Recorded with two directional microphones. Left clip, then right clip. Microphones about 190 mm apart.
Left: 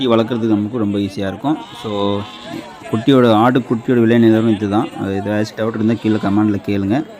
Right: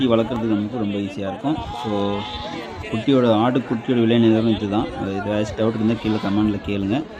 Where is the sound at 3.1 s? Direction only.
30° left (ahead or behind).